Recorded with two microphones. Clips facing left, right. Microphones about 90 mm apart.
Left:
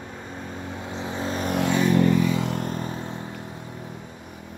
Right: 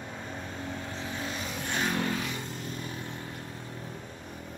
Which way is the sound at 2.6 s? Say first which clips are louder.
Left 7 dB; 35° left (ahead or behind).